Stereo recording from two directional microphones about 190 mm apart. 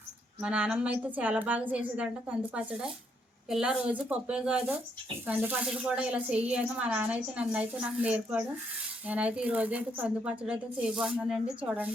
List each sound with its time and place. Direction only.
0.4 s speech: 5° right (ahead or behind)